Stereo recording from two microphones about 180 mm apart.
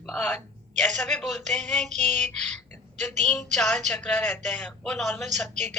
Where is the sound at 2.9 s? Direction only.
40° right (ahead or behind).